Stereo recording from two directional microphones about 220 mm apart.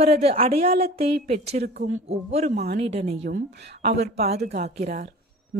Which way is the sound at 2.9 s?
30° right (ahead or behind).